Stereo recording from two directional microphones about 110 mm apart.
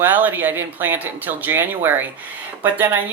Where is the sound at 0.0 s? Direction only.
20° right (ahead or behind).